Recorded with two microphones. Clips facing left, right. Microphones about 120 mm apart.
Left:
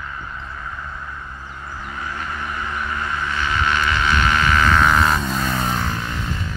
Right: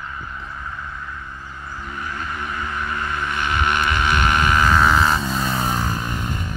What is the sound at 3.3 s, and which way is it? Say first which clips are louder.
Vehicle: even; 55° right (ahead or behind).